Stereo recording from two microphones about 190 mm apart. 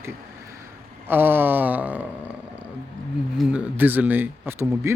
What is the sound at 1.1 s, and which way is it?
Speech, 10° right (ahead or behind).